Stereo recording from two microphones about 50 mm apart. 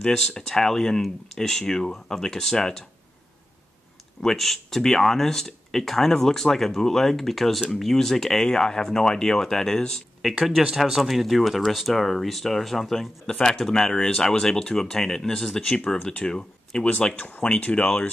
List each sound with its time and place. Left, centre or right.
0.0 s speech: centre
4.2 s speech: centre
10.6 s speech: centre
13.3 s speech: centre
16.0 s speech: left
16.3 s speech: centre